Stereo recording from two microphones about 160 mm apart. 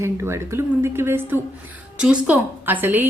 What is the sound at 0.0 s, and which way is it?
A woman's voice, 15° right (ahead or behind).